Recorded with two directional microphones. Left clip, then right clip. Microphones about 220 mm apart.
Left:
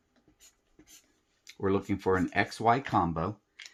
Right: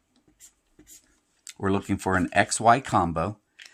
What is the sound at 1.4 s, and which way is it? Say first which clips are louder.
Speech: right 2 dB; 50° right (ahead or behind).